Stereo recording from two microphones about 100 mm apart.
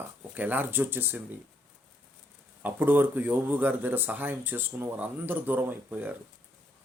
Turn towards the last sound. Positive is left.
turn(degrees=-20)  # may be behind; listen again after turning